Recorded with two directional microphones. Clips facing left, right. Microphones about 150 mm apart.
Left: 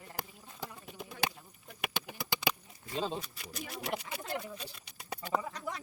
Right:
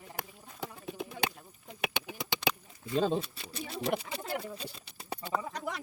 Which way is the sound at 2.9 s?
55° right (ahead or behind).